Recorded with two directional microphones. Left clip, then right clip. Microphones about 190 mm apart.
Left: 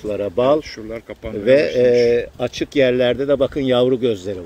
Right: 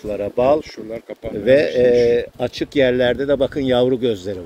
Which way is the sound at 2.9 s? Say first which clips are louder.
Even; centre (ahead or behind).